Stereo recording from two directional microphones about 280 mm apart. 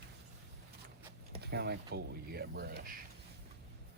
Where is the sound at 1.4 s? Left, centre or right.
Right.